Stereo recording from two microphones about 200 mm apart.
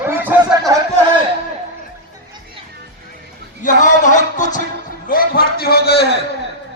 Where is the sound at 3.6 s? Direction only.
40° left (ahead or behind).